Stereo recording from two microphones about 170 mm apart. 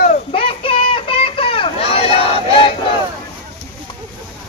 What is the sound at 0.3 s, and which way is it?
Children playing, 35° left (ahead or behind).